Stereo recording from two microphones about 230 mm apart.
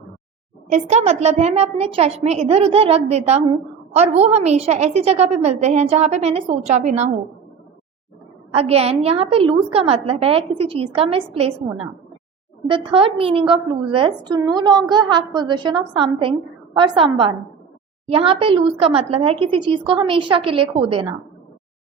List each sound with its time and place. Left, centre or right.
0.7 s a woman's voice: right
8.5 s a woman's voice: right
12.6 s a woman's voice: right